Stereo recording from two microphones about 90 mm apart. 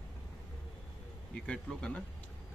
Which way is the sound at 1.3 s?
10° left (ahead or behind).